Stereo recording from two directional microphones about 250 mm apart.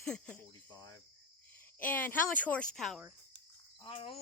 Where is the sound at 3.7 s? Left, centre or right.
Centre.